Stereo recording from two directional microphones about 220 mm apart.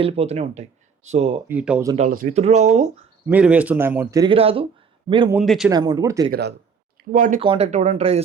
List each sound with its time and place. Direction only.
0.0 s speech: 30° right (ahead or behind)
1.5 s speech: 5° right (ahead or behind)
2.0 s speech: 35° right (ahead or behind)
3.2 s speech: 5° right (ahead or behind); by 5.3 s 20° right (ahead or behind)
5.3 s a man's voice: centre (ahead or behind)
5.7 s speech: 20° right (ahead or behind)
6.3 s speech: 50° right (ahead or behind)
7.1 s speech: 35° right (ahead or behind)